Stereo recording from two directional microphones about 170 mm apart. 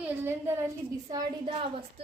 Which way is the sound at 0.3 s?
15° right (ahead or behind).